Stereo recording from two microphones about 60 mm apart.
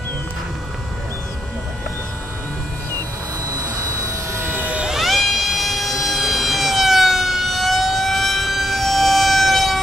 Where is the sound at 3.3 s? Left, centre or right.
Right.